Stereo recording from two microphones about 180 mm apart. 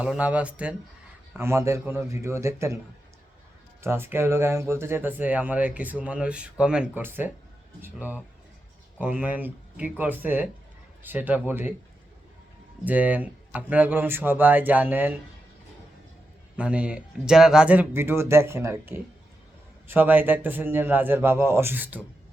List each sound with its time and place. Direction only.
0.0 s speech: 5° right (ahead or behind)
3.8 s speech: 15° right (ahead or behind)
12.8 s speech: 10° right (ahead or behind)
16.6 s speech: 5° right (ahead or behind)